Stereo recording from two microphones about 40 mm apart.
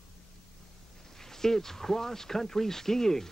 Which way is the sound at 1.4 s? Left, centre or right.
Centre.